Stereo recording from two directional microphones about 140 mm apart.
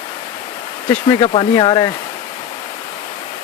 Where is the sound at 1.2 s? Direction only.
40° left (ahead or behind).